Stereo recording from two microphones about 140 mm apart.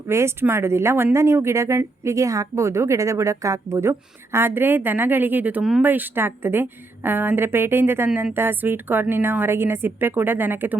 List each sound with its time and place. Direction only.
0.1 s a woman's voice: 20° right (ahead or behind)